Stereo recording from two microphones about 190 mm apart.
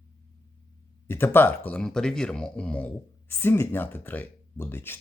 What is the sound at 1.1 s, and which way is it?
Speech, 10° left (ahead or behind).